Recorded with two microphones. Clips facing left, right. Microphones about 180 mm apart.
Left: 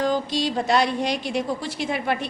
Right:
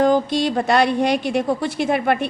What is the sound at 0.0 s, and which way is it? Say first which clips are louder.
A woman's voice: right 6 dB; 55° right (ahead or behind).